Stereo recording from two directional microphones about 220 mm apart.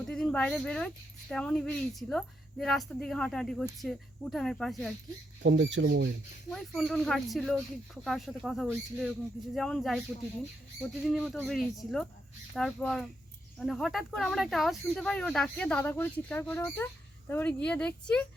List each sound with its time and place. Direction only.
0.0 s a sound: 5° left (ahead or behind)
1.3 s speech: 5° left (ahead or behind)
5.4 s speech: 55° right (ahead or behind)
6.5 s speech: centre (ahead or behind)